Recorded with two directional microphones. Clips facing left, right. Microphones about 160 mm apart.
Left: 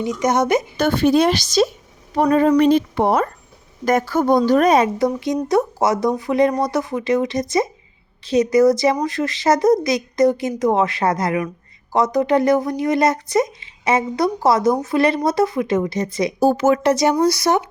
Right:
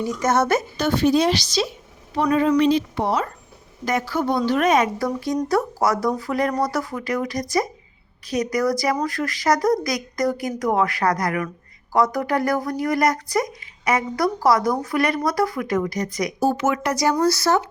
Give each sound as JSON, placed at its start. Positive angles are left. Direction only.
{"t": 0.0, "sound": "speech", "side_deg": 20}
{"t": 0.8, "sound": "a woman's voice", "side_deg": 55}
{"t": 4.9, "sound": "a woman's voice", "side_deg": 20}